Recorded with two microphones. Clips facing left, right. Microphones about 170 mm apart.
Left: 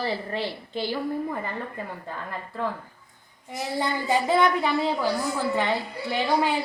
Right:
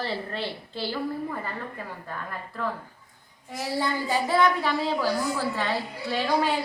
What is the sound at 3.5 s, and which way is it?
A woman's voice, 20° left (ahead or behind).